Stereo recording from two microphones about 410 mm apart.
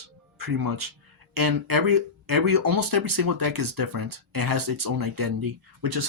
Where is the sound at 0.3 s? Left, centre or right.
Right.